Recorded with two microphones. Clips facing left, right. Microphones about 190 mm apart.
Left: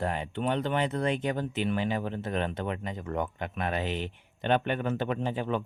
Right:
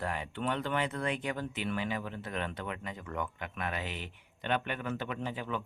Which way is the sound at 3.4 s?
30° left (ahead or behind).